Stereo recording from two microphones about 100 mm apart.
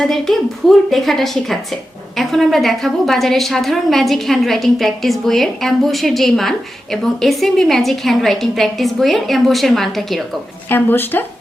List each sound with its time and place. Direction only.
0.0 s a woman's voice: centre (ahead or behind)
10.7 s speech: 20° left (ahead or behind)